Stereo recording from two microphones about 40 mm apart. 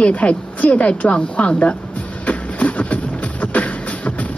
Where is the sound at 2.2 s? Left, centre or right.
Left.